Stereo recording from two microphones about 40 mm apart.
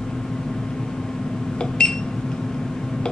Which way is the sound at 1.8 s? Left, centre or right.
Left.